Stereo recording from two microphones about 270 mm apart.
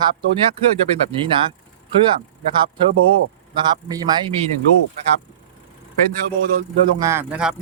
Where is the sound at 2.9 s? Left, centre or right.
Right.